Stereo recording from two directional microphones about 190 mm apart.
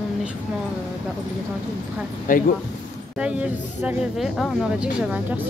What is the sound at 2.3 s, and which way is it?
Speech, 45° left (ahead or behind).